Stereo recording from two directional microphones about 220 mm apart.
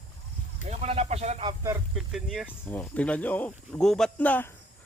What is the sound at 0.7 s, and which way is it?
Speech, 30° right (ahead or behind).